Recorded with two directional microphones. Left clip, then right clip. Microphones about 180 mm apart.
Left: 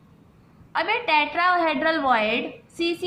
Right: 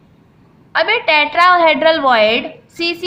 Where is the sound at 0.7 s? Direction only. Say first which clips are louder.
Right 8 dB; 20° right (ahead or behind).